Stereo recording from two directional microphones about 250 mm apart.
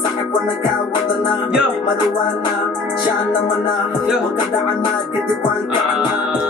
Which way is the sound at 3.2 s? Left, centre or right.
Centre.